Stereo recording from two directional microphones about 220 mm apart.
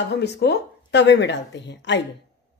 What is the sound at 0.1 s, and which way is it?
A woman's voice, 50° left (ahead or behind).